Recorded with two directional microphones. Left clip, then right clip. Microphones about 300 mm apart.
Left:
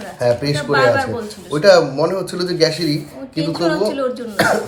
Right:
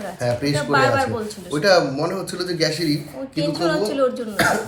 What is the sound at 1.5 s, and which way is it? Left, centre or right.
Speech, centre.